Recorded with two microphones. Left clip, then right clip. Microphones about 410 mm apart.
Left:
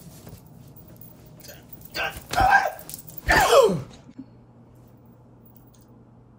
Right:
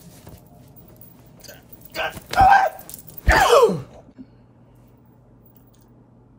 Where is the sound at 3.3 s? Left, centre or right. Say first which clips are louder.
Right 2 dB; centre.